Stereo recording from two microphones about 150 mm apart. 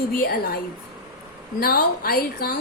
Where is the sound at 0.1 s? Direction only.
80° left.